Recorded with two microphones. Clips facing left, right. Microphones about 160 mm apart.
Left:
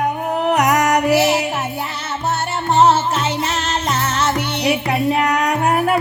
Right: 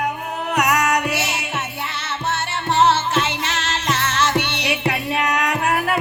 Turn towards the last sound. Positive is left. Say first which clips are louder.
# left 4 dB
turn(degrees=30)  # may be behind; listen again after turning